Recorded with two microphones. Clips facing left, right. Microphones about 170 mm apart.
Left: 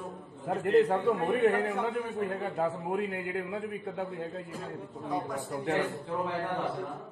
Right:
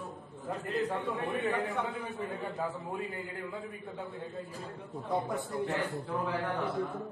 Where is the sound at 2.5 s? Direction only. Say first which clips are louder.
Left 6 dB; 65° left (ahead or behind).